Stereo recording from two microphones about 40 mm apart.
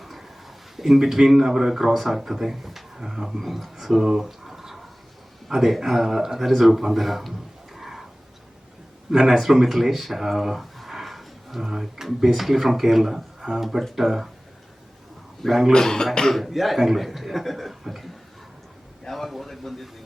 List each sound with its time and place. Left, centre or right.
0.0 s a sound: centre
0.8 s speech: centre
9.0 s speech: centre
15.7 s speech: centre
16.4 s speech: centre